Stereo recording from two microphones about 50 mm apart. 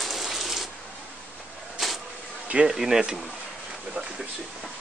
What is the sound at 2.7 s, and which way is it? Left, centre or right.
Speech, centre.